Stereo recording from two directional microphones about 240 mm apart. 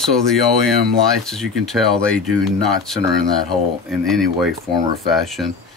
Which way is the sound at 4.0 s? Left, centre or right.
Centre.